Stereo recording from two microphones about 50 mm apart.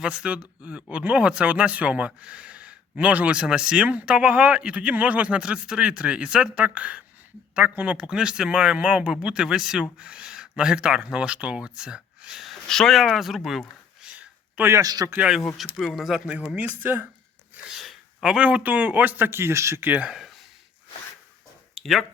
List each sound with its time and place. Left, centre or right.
0.0 s speech: centre
12.6 s speech: centre
14.0 s a sound: right
14.6 s speech: right
15.5 s speech: centre
16.0 s speech: centre
16.6 s a man's voice: right
17.7 s gasp: centre
18.3 s a man's voice: right
21.8 s a sound: centre